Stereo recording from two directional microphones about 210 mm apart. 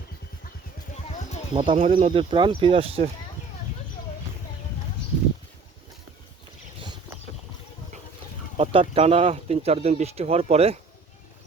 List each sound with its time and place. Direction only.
1.5 s speech: 30° right (ahead or behind)
8.5 s speech: 25° right (ahead or behind)